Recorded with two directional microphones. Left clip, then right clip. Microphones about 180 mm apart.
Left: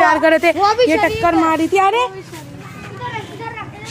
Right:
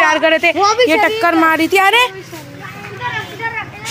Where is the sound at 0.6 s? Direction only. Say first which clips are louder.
Right 2 dB; 25° right (ahead or behind).